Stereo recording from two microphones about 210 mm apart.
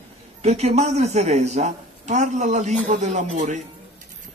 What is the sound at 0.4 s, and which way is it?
A man's voice, 30° right (ahead or behind).